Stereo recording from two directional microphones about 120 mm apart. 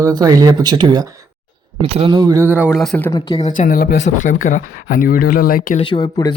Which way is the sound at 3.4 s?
85° left.